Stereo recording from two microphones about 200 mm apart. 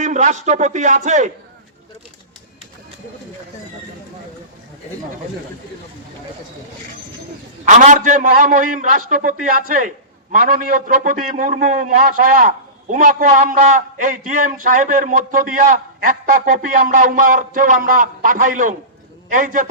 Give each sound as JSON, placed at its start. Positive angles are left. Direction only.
{"t": 0.0, "sound": "a man's voice", "side_deg": -35}
{"t": 7.6, "sound": "a man's voice", "side_deg": -40}